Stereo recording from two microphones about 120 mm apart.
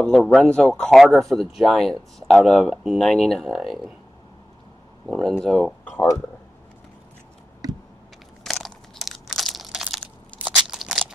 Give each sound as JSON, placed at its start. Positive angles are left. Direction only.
{"t": 0.0, "sound": "speech", "side_deg": 0}
{"t": 5.0, "sound": "speech", "side_deg": -5}
{"t": 5.9, "sound": "speech", "side_deg": 25}
{"t": 7.6, "sound": "a sound", "side_deg": -30}
{"t": 8.5, "sound": "crushing", "side_deg": 0}
{"t": 10.4, "sound": "crunch", "side_deg": -5}